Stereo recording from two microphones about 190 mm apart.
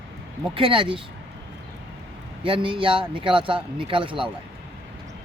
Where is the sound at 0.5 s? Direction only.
25° right (ahead or behind).